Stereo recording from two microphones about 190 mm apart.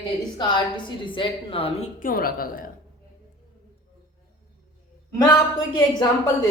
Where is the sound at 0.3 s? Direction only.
25° left (ahead or behind).